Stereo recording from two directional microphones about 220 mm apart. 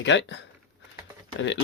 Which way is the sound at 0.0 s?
55° left (ahead or behind).